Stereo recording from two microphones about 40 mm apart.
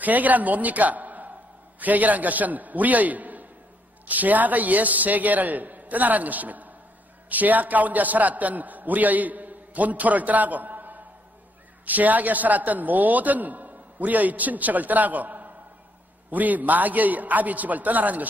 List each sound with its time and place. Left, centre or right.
0.0 s a man's voice: right